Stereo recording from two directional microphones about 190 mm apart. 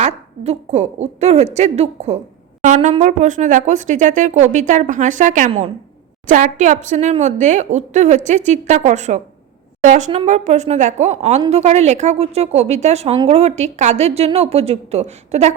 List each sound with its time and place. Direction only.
0.0 s speech: 35° right (ahead or behind)